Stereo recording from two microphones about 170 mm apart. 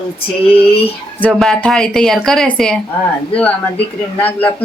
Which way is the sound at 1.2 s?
5° left (ahead or behind).